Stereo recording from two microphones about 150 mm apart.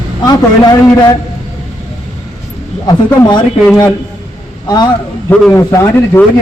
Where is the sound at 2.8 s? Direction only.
30° left (ahead or behind).